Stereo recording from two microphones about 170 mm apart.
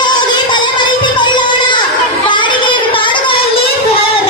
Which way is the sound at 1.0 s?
25° left (ahead or behind).